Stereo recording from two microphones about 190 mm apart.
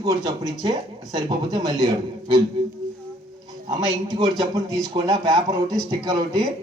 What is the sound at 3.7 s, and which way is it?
A man's voice, 20° right (ahead or behind).